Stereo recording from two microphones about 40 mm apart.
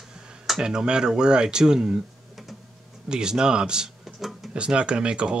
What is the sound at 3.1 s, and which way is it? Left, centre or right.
Speech, centre.